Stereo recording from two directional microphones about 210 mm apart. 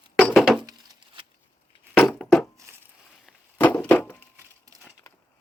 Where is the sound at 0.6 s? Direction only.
20° right (ahead or behind).